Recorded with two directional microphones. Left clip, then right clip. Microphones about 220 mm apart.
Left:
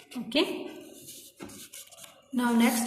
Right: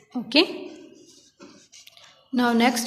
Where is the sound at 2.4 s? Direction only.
50° right (ahead or behind).